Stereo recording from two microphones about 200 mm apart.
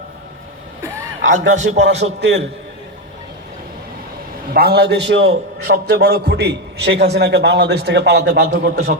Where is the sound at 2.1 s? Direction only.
60° right (ahead or behind).